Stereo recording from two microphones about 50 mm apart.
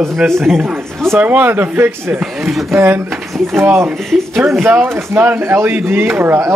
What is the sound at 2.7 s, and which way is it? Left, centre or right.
Speech, right.